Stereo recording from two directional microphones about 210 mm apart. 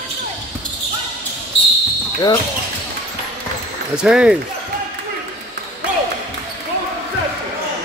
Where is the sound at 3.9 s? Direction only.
5° right (ahead or behind).